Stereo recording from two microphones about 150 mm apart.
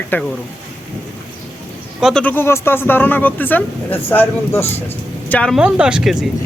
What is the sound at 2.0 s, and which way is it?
Speech, centre (ahead or behind).